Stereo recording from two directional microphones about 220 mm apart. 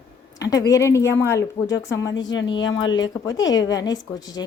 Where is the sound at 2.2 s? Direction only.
55° left (ahead or behind).